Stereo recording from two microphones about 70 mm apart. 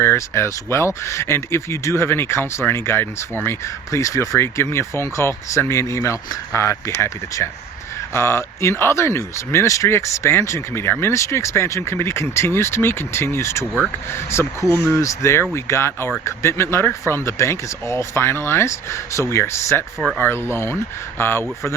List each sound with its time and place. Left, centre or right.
0.0 s speech: left
3.9 s speech: left